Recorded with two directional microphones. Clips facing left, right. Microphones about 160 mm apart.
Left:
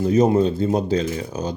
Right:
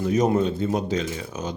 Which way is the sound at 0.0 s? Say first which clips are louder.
Left 4 dB; 30° left (ahead or behind).